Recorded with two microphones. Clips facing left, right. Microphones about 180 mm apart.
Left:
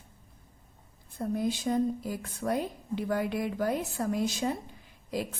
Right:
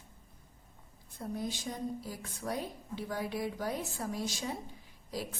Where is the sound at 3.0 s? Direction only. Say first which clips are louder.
Left 5 dB; 55° left (ahead or behind).